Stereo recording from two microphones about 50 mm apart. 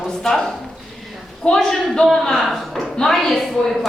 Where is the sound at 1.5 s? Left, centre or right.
Centre.